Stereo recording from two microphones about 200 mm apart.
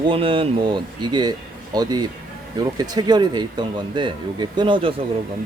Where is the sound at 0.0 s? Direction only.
25° right (ahead or behind).